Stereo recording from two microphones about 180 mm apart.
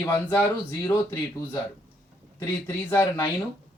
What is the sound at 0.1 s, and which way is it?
Speech, 15° left (ahead or behind).